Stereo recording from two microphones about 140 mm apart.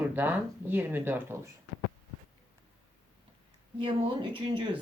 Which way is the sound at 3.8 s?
35° right (ahead or behind).